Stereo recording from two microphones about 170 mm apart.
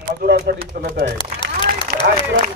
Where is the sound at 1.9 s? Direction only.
55° right (ahead or behind).